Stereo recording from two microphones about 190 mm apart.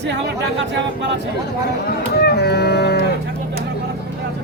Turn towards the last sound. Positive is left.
turn(degrees=60)  # may be behind; listen again after turning